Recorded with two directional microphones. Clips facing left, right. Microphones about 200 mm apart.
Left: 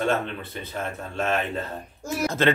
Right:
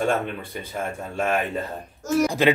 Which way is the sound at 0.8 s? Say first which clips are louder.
Right 2 dB; 10° right (ahead or behind).